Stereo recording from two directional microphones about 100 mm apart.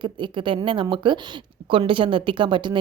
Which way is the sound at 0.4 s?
60° right (ahead or behind).